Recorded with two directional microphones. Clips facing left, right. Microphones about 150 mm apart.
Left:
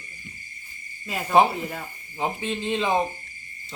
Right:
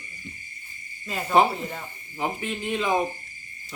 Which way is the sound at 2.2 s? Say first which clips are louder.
Left 2 dB; 25° left (ahead or behind).